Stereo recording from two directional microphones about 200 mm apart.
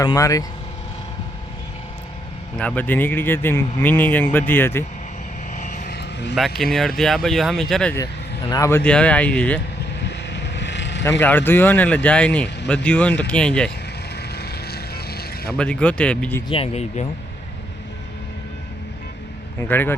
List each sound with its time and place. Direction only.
0.0 s speech: 20° left (ahead or behind)
2.6 s speech: 5° left (ahead or behind)
5.5 s vehicle: 40° left (ahead or behind)
6.0 s vehicle: 60° left (ahead or behind)
6.6 s speech: centre (ahead or behind)
7.9 s speech: 20° left (ahead or behind)
10.0 s vehicle: 60° left (ahead or behind)
11.2 s speech: 10° left (ahead or behind)
14.2 s vehicle: 55° left (ahead or behind)
15.5 s speech: 5° left (ahead or behind)
16.5 s speech: 30° left (ahead or behind)
19.5 s speech: 10° left (ahead or behind)